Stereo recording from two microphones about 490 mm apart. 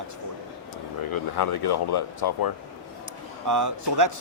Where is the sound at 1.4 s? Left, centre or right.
Left.